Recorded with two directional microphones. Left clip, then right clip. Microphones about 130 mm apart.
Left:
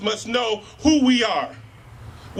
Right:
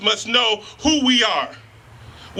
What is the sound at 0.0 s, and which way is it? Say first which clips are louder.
A man's voice: right 5 dB; 15° right (ahead or behind).